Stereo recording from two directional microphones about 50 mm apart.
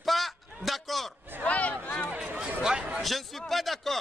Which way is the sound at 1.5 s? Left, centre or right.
Left.